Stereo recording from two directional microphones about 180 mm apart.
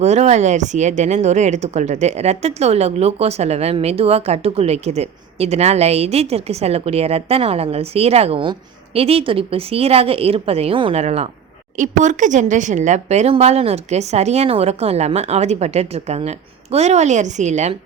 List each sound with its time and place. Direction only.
0.0 s speech: 35° right (ahead or behind)